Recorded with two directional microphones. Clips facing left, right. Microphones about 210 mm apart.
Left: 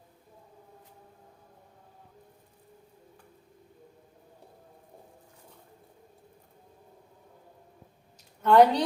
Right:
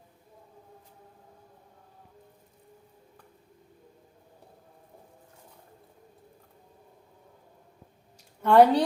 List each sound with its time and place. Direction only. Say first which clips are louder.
8.4 s a woman's voice: right 1 dB; 5° right (ahead or behind)